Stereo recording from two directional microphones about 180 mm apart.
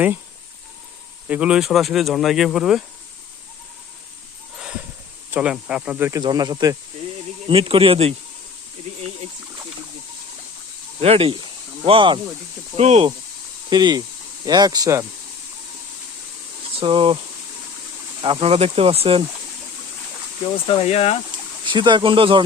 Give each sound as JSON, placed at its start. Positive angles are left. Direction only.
{"t": 1.3, "sound": "speech", "side_deg": -5}
{"t": 4.5, "sound": "a sound", "side_deg": -5}
{"t": 5.3, "sound": "speech", "side_deg": -5}
{"t": 11.0, "sound": "speech", "side_deg": -35}
{"t": 13.7, "sound": "speech", "side_deg": -25}
{"t": 16.7, "sound": "speech", "side_deg": -30}
{"t": 18.2, "sound": "speech", "side_deg": -30}
{"t": 20.7, "sound": "speech", "side_deg": 30}
{"t": 21.6, "sound": "speech", "side_deg": -25}